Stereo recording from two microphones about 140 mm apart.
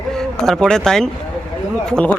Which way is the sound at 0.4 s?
5° left (ahead or behind).